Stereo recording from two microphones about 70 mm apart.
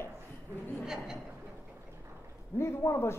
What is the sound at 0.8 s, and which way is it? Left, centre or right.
Speech, centre.